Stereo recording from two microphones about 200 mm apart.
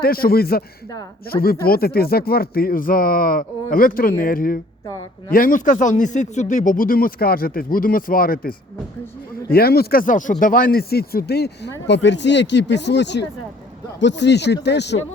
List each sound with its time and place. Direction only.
0.0 s speech: 50° left (ahead or behind)